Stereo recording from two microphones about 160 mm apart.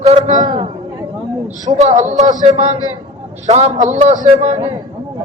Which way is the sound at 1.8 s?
50° right (ahead or behind).